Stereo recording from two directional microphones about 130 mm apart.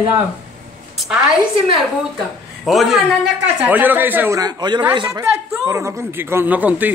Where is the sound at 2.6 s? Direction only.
Centre (ahead or behind); by 4.4 s 15° right (ahead or behind).